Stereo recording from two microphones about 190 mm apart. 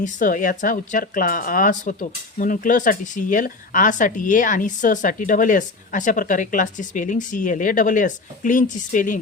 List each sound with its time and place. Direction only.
0.0 s speech: 45° left (ahead or behind)